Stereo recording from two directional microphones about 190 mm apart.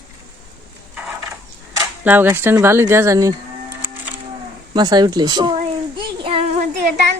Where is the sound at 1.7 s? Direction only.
10° right (ahead or behind).